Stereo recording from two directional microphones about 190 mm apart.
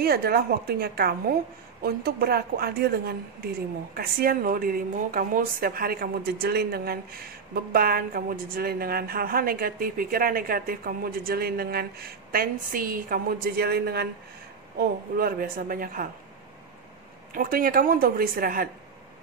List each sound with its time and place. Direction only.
0.0 s a woman's voice: 55° right (ahead or behind)
17.3 s a woman's voice: 45° right (ahead or behind)